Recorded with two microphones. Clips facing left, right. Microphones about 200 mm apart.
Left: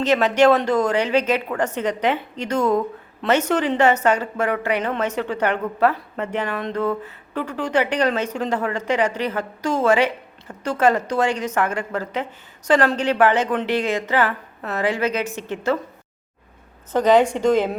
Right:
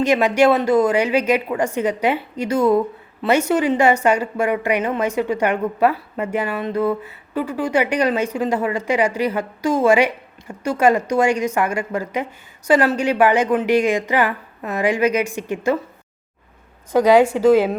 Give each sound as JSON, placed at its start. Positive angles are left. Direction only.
{"t": 0.0, "sound": "a woman's voice", "side_deg": -10}
{"t": 16.9, "sound": "a woman's voice", "side_deg": -10}